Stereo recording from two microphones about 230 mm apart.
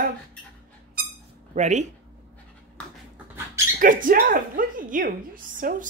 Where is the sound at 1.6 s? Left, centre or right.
Right.